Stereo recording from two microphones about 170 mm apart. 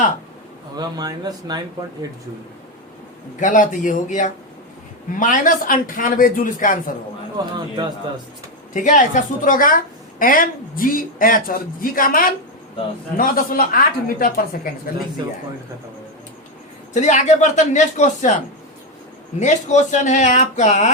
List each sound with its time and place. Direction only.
0.8 s speech: 25° right (ahead or behind)
3.4 s speech: 50° left (ahead or behind)
7.4 s speech: 20° right (ahead or behind)
8.7 s a woman's voice: 50° left (ahead or behind)
15.2 s speech: 25° right (ahead or behind)
16.9 s speech: 45° left (ahead or behind)
19.4 s speech: 45° left (ahead or behind)